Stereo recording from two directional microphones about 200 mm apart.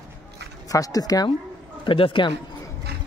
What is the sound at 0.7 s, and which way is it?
Speech, 15° left (ahead or behind).